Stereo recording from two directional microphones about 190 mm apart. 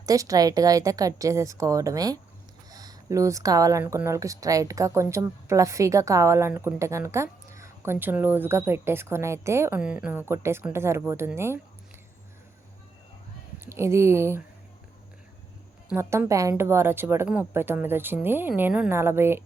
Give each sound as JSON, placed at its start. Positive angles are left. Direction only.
{"t": 0.0, "sound": "a woman's voice", "side_deg": -20}
{"t": 13.7, "sound": "a woman's voice", "side_deg": -15}
{"t": 15.9, "sound": "a woman's voice", "side_deg": -15}